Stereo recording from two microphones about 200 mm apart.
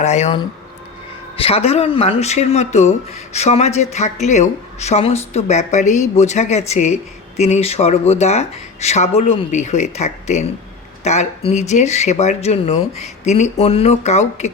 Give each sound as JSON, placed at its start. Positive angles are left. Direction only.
{"t": 0.0, "sound": "speech", "side_deg": 35}
{"t": 1.4, "sound": "speech", "side_deg": 30}